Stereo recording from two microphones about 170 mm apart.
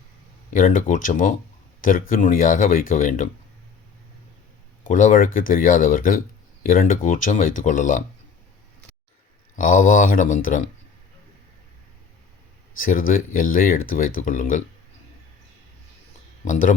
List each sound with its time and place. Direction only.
0.5 s speech: 50° left (ahead or behind)
4.9 s speech: 50° left (ahead or behind)
9.6 s speech: 50° left (ahead or behind)
12.8 s speech: 55° left (ahead or behind)
16.4 s speech: 50° left (ahead or behind)